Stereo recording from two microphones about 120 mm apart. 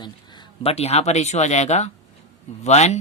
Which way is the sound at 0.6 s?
55° left (ahead or behind).